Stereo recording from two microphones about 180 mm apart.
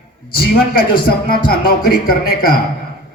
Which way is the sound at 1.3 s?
60° left (ahead or behind).